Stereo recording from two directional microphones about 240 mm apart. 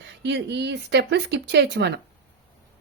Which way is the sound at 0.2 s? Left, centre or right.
Right.